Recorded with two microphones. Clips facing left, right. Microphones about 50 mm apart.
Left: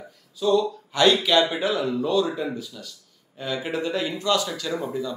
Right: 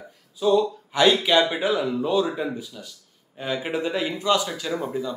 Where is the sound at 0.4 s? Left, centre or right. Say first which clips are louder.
Right 1 dB; right.